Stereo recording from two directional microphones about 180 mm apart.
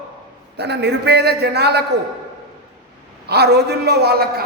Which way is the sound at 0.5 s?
70° right (ahead or behind).